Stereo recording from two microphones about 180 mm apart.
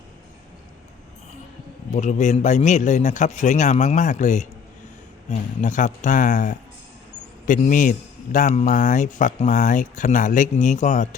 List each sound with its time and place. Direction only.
1.9 s a man's voice: 40° left (ahead or behind)